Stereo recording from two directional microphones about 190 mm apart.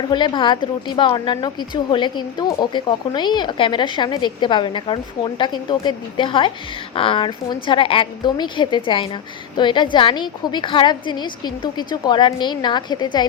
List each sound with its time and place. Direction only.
0.1 s a woman's voice: 25° left (ahead or behind)